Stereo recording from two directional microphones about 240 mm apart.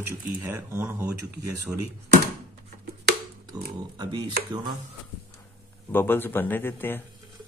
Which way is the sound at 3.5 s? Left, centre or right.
Centre.